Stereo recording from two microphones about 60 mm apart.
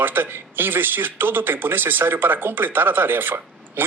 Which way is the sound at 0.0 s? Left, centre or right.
Right.